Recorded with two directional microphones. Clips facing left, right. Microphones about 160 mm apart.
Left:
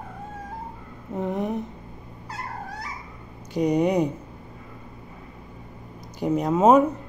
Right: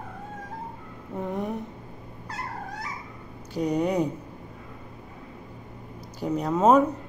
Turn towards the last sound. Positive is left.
turn(degrees=10)  # may be behind; listen again after turning